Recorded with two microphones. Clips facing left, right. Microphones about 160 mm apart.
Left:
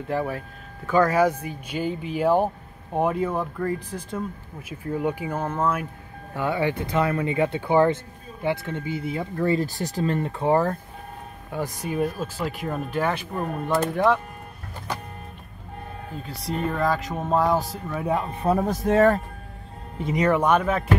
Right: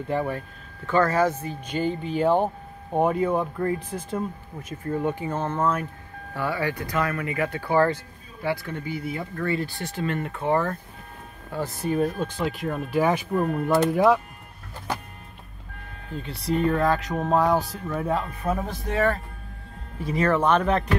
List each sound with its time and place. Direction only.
0.1 s speech: centre (ahead or behind)
6.3 s speech: 20° left (ahead or behind)
9.6 s speech: 40° left (ahead or behind)
11.5 s speech: 15° left (ahead or behind); by 14.2 s 5° right (ahead or behind)
16.2 s speech: centre (ahead or behind)
18.0 s speech: 15° left (ahead or behind)
18.4 s speech: 40° left (ahead or behind)
20.0 s speech: 20° left (ahead or behind)